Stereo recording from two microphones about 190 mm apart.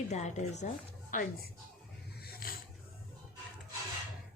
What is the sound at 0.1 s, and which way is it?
A woman's voice, 35° left (ahead or behind).